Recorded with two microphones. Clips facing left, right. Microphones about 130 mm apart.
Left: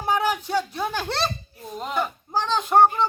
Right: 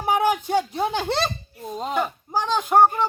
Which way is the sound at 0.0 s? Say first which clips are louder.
Right 3 dB; 15° right (ahead or behind).